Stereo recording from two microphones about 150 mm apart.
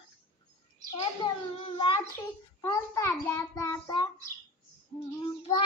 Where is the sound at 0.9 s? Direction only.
35° left (ahead or behind).